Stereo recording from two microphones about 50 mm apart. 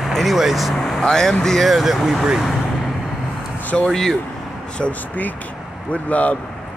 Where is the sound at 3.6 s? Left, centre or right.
Left.